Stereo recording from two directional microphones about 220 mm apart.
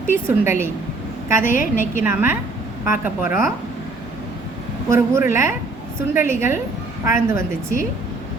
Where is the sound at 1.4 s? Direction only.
35° left (ahead or behind).